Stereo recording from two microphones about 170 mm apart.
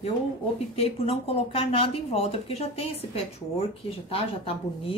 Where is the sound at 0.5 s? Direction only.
35° left (ahead or behind).